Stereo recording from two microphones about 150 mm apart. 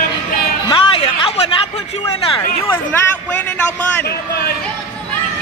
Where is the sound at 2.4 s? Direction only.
15° left (ahead or behind).